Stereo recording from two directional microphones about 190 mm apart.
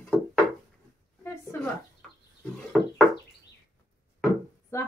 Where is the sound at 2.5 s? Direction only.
Centre (ahead or behind).